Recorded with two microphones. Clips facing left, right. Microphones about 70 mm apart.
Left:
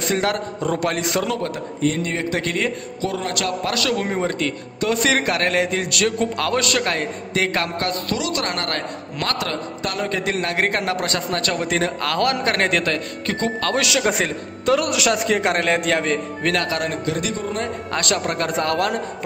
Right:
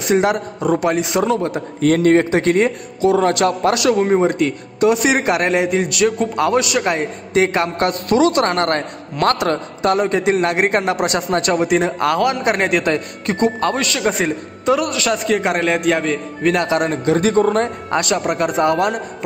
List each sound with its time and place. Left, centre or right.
0.1 s a man's voice: centre
1.2 s a man's voice: right
1.8 s a man's voice: right
2.3 s a man's voice: right
3.0 s a man's voice: centre
3.3 s a man's voice: right
13.7 s a man's voice: centre
14.9 s a man's voice: centre
16.5 s a man's voice: right
17.4 s a man's voice: right
18.1 s a man's voice: centre